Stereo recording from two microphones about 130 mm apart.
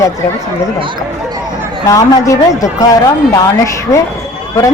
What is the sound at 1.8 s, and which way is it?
A man's voice, 25° left (ahead or behind).